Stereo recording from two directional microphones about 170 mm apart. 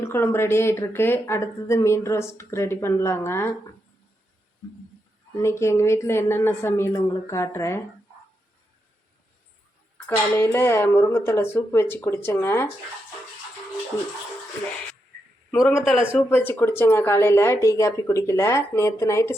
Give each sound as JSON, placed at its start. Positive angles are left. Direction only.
{"t": 0.0, "sound": "speech", "side_deg": 15}
{"t": 5.4, "sound": "speech", "side_deg": 15}
{"t": 10.3, "sound": "speech", "side_deg": 15}
{"t": 15.5, "sound": "speech", "side_deg": 15}
{"t": 15.8, "sound": "a man's voice", "side_deg": 0}
{"t": 16.3, "sound": "speech", "side_deg": 15}